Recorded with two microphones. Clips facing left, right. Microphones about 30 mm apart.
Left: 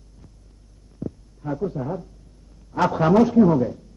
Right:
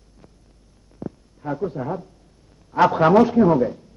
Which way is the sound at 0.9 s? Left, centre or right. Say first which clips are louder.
Left 1 dB; right.